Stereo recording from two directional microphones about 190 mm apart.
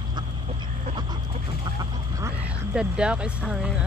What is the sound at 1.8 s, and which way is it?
Quack, 15° right (ahead or behind).